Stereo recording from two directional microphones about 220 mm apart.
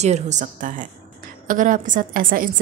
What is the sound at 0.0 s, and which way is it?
A woman's voice, 30° right (ahead or behind).